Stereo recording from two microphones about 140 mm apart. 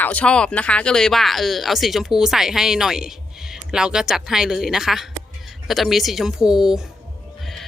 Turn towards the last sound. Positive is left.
turn(degrees=-5)  # may be behind; listen again after turning